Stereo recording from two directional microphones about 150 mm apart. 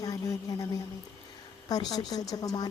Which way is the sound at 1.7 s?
25° left (ahead or behind).